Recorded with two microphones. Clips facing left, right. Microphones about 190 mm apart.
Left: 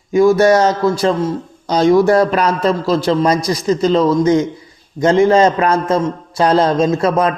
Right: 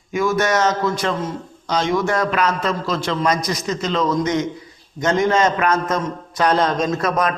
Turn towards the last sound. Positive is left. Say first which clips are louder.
# left 5 dB
turn(degrees=30)  # may be behind; listen again after turning